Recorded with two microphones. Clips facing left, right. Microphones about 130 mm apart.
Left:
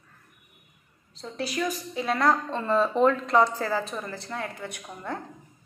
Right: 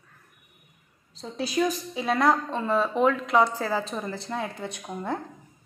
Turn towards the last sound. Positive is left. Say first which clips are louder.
# right 4 dB
turn(degrees=-20)  # may be behind; listen again after turning